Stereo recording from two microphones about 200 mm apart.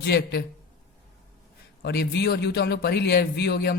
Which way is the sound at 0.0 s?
60° left (ahead or behind).